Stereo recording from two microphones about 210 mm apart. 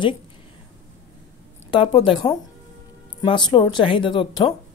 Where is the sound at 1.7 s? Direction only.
25° left (ahead or behind).